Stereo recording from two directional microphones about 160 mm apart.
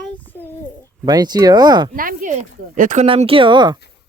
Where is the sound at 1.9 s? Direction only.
60° right (ahead or behind).